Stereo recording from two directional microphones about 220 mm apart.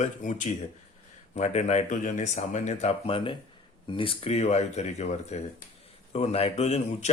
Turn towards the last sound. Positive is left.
turn(degrees=30)  # may be behind; listen again after turning